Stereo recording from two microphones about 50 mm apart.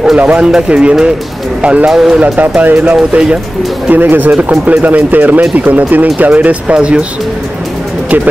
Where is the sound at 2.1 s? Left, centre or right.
Right.